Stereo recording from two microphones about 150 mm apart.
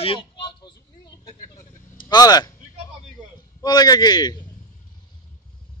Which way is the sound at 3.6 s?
25° left (ahead or behind).